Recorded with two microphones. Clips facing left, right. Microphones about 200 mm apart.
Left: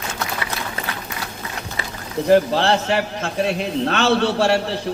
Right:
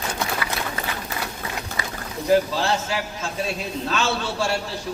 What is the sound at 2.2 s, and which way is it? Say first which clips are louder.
A man's voice: left 4 dB; 65° left (ahead or behind).